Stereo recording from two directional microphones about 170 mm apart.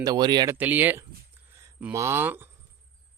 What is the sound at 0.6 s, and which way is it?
A man's voice, 10° right (ahead or behind).